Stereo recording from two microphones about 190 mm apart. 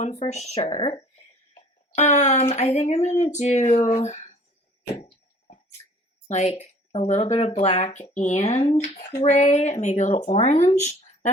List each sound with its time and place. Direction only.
0.0 s speech: 35° left (ahead or behind)
0.7 s speech: 25° left (ahead or behind)
1.5 s speech: 35° left (ahead or behind)
6.2 s speech: 35° left (ahead or behind)